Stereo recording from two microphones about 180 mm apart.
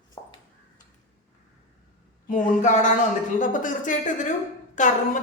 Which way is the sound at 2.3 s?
45° left (ahead or behind).